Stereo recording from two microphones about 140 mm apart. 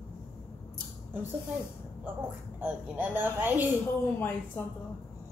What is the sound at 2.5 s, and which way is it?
A woman's voice, 10° right (ahead or behind).